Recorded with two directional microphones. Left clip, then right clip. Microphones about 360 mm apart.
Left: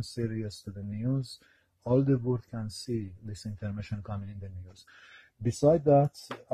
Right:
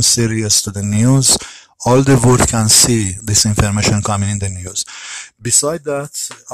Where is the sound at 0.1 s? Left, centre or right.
Right.